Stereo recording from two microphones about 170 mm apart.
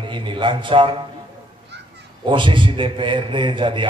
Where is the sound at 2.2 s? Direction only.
30° right (ahead or behind).